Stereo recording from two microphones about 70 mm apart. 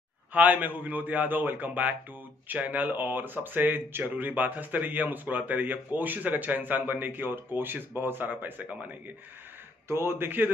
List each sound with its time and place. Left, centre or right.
0.3 s speech: right
9.8 s a man's voice: right